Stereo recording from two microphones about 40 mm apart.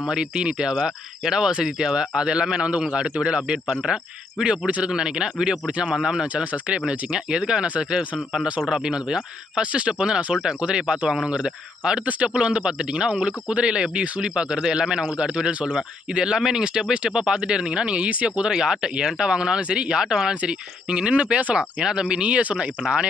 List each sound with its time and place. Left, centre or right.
0.1 s speech: right
0.7 s speech: centre
4.6 s a man's voice: right
4.9 s speech: right
8.8 s speech: right
18.5 s speech: centre; by 21.5 s right
21.8 s speech: centre